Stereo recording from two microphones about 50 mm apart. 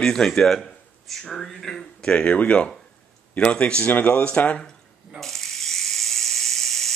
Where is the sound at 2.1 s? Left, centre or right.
Left.